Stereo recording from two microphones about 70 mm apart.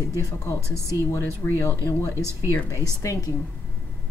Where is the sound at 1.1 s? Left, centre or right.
Left.